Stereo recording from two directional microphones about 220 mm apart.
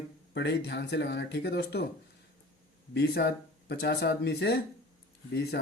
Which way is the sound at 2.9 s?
50° left (ahead or behind).